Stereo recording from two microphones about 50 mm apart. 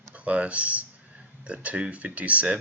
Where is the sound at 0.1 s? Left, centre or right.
Right.